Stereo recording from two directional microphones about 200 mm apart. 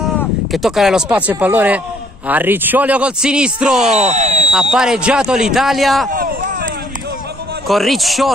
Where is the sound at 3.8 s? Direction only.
35° right (ahead or behind).